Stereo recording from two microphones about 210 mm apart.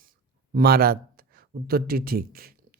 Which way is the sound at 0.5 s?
45° right (ahead or behind).